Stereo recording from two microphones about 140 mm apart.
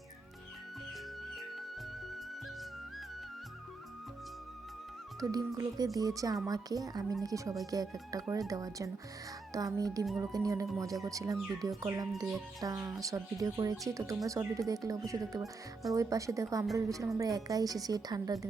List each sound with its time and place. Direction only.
5.2 s speech: 25° right (ahead or behind)